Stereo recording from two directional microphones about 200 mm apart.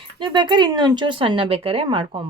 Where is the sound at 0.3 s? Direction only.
20° right (ahead or behind).